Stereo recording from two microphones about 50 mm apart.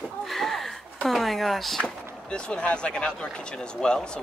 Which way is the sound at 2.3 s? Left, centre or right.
Left.